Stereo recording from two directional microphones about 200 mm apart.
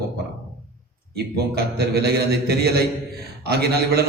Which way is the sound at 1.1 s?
50° right (ahead or behind).